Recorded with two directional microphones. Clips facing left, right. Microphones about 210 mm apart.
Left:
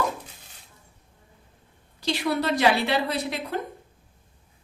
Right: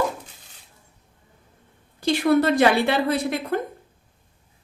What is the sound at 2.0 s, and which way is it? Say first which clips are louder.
A woman's voice: right 7 dB; 50° right (ahead or behind).